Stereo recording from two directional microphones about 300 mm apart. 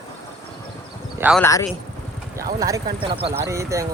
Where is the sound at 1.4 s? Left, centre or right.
Centre.